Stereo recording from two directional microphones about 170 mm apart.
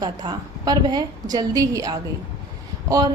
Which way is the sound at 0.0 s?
25° right (ahead or behind).